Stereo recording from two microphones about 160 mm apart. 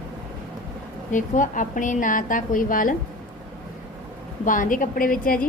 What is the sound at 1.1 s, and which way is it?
A woman's voice, 55° left (ahead or behind).